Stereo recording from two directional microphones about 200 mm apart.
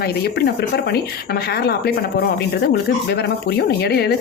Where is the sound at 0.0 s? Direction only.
50° left (ahead or behind).